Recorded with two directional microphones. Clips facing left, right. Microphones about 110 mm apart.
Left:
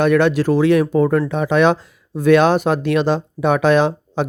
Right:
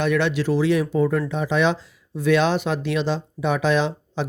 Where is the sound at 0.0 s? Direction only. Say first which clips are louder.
Left 7 dB; 50° left (ahead or behind).